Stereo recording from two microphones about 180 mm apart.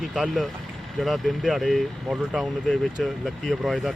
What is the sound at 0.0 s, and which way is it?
Speech, centre (ahead or behind).